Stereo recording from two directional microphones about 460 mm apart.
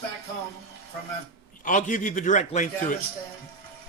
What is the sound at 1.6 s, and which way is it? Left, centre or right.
Speech, centre.